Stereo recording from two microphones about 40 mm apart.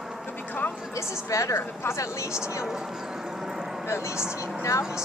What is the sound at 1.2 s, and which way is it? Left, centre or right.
Speech, left.